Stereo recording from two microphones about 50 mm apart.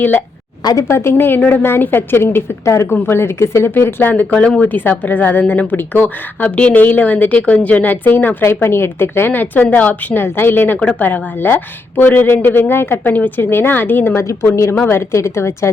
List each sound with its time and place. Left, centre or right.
0.0 s a woman's voice: left
0.8 s a woman's voice: left
1.4 s a woman's voice: left
2.6 s speech: left
2.9 s a woman's voice: left
4.1 s speech: left
4.7 s a woman's voice: left
6.6 s speech: left
6.8 s a woman's voice: left
8.6 s a woman's voice: left
10.2 s a woman's voice: left
10.8 s a woman's voice: left
14.2 s speech: left